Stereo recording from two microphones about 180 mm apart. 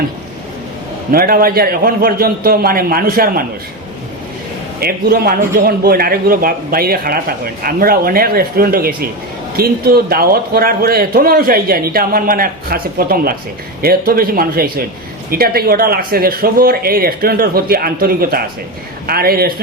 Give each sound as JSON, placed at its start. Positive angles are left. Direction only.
{"t": 1.1, "sound": "a man's voice", "side_deg": -55}
{"t": 4.8, "sound": "a man's voice", "side_deg": -55}